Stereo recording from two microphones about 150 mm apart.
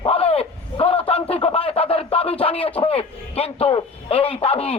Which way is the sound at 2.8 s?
40° left (ahead or behind).